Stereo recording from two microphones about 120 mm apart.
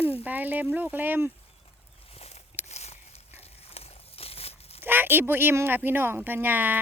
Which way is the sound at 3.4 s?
55° left (ahead or behind).